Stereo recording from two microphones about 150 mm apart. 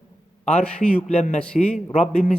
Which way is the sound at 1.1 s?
50° left (ahead or behind).